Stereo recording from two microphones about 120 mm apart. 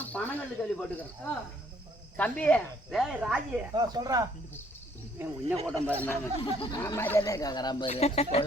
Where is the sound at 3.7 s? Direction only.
35° right (ahead or behind).